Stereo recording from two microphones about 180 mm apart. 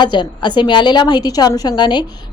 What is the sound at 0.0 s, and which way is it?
A woman's voice, 25° left (ahead or behind).